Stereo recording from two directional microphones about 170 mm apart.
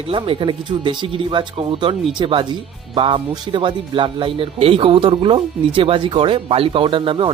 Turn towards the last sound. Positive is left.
turn(degrees=-30)  # may be behind; listen again after turning